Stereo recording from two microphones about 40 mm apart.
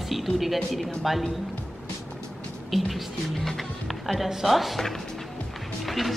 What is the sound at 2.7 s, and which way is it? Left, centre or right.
Music, centre.